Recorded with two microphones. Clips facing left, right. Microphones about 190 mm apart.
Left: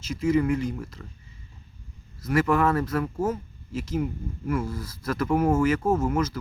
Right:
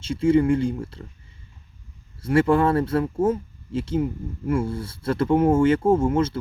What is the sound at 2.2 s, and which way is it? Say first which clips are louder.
Speech: right 4 dB; 30° right (ahead or behind).